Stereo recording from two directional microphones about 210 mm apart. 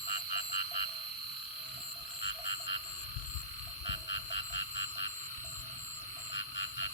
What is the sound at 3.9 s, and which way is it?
Frog, 60° left (ahead or behind).